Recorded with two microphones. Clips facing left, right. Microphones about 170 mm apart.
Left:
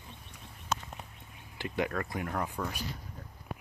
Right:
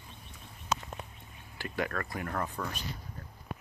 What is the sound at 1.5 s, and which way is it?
Speech, 20° left (ahead or behind).